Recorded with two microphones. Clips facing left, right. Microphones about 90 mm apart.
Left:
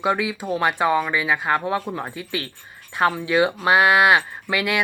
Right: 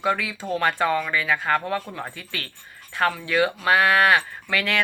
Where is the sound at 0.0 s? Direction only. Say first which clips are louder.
Left 2 dB; 20° left (ahead or behind).